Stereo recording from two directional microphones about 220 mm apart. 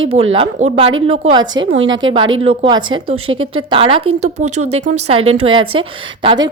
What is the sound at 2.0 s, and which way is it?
A woman's voice, 20° right (ahead or behind).